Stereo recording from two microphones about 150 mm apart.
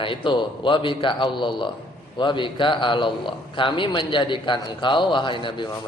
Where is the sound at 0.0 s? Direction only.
35° left (ahead or behind).